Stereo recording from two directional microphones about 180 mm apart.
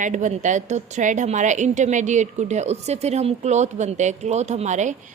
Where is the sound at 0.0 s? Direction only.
45° right (ahead or behind).